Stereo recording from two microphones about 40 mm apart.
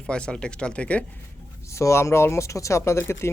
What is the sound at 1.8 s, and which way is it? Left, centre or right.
Speech, left.